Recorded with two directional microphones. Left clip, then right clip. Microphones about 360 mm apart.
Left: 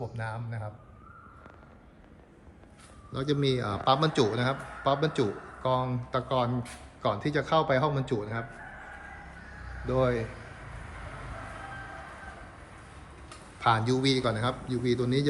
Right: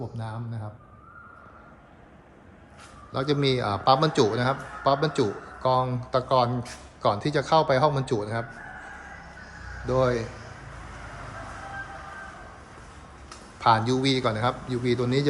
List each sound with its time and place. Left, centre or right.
0.0 s a man's voice: centre
3.1 s a man's voice: centre
9.8 s a man's voice: centre
13.6 s a man's voice: centre